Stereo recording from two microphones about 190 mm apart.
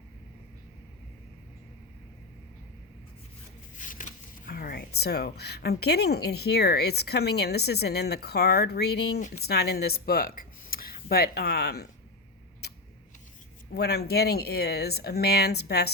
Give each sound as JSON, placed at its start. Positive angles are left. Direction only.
{"t": 3.8, "sound": "a sound", "side_deg": 40}
{"t": 5.8, "sound": "speech", "side_deg": 60}
{"t": 13.7, "sound": "speech", "side_deg": 55}